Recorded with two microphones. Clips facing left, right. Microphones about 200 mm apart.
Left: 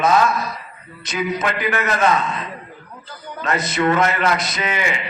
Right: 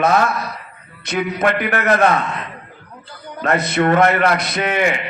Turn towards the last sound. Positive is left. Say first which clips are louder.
# right 5 dB
turn(degrees=-55)  # may be behind; listen again after turning